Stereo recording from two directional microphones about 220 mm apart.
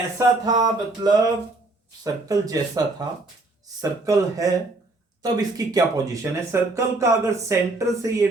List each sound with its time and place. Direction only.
0.2 s speech: 15° right (ahead or behind)
2.2 s speech: 15° right (ahead or behind)